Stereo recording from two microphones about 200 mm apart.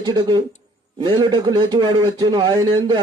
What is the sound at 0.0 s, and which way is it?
Speech, 20° right (ahead or behind).